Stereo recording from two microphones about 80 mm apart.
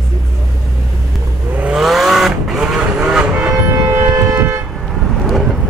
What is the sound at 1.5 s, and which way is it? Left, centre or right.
Vehicle, centre.